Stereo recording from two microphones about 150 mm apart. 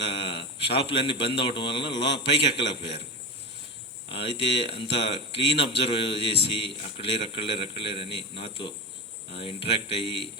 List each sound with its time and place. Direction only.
0.2 s speech: 40° left (ahead or behind)
4.1 s speech: 40° left (ahead or behind)